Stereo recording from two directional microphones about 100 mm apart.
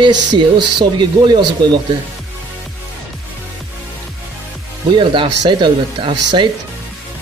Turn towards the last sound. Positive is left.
turn(degrees=-55)  # may be behind; listen again after turning